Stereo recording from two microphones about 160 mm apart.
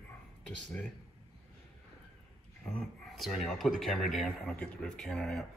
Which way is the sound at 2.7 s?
Centre (ahead or behind).